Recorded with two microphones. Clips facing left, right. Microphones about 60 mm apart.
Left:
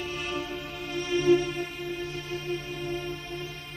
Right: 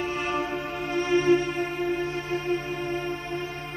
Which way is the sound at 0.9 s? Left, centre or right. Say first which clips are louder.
Right 2 dB; right.